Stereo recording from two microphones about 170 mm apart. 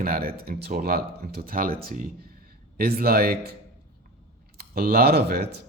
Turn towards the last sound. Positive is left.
turn(degrees=-70)  # may be behind; listen again after turning